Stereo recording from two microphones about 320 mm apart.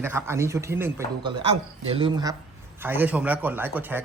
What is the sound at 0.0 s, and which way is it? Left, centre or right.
Speech, centre.